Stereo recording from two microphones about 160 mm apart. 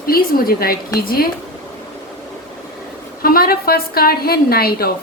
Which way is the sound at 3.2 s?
65° left (ahead or behind).